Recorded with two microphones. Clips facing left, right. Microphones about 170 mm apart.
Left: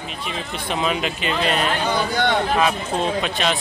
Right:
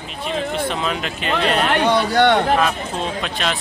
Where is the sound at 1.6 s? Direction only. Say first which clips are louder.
Right 4 dB; 70° right (ahead or behind).